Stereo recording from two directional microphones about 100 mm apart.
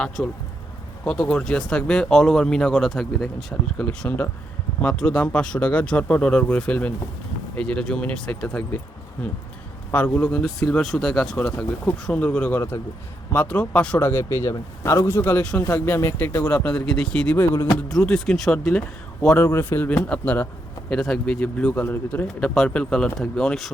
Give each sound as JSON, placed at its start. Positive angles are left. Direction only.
{"t": 0.2, "sound": "speech", "side_deg": 15}
{"t": 9.9, "sound": "speech", "side_deg": 15}
{"t": 14.0, "sound": "a man's voice", "side_deg": 30}
{"t": 15.6, "sound": "a man's voice", "side_deg": 30}
{"t": 16.6, "sound": "speech", "side_deg": 15}
{"t": 17.3, "sound": "speech", "side_deg": 30}
{"t": 18.0, "sound": "speech", "side_deg": 10}
{"t": 19.3, "sound": "a man's voice", "side_deg": 25}
{"t": 20.0, "sound": "speech", "side_deg": 15}
{"t": 22.4, "sound": "speech", "side_deg": 10}